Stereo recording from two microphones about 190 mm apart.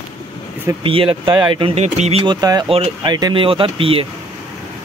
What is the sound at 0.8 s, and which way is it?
Speech, 30° right (ahead or behind).